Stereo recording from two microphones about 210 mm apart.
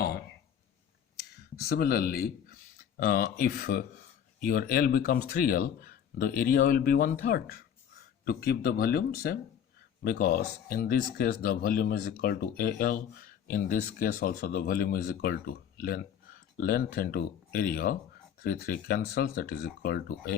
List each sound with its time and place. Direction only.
1.6 s speech: 45° left (ahead or behind)